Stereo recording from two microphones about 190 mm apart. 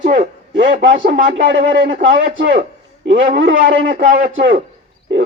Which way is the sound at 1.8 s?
45° right (ahead or behind).